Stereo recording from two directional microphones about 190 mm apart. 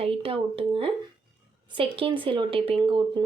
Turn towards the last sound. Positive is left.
turn(degrees=-30)  # may be behind; listen again after turning